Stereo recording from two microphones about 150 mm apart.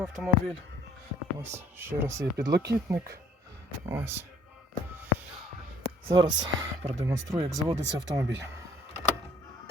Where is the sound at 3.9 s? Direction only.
15° right (ahead or behind).